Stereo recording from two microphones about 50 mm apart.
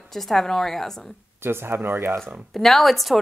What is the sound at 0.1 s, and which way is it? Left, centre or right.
Speech, centre.